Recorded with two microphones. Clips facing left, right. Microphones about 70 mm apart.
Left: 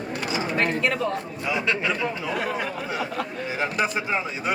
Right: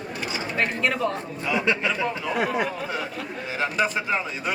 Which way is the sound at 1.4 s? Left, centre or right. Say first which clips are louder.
Right 2 dB; centre.